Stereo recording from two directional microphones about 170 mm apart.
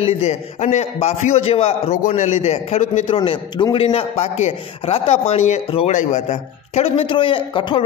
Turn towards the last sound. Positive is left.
turn(degrees=30)  # may be behind; listen again after turning